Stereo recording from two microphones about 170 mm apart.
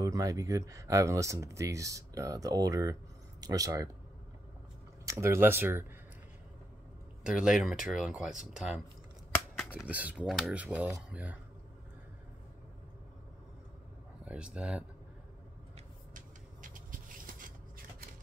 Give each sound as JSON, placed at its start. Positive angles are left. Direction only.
{"t": 0.0, "sound": "speech", "side_deg": -20}
{"t": 5.0, "sound": "speech", "side_deg": -15}
{"t": 7.2, "sound": "speech", "side_deg": -5}
{"t": 14.2, "sound": "speech", "side_deg": -5}
{"t": 16.1, "sound": "a sound", "side_deg": -50}